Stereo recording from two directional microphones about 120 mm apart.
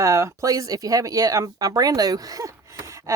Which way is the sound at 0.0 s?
25° right (ahead or behind).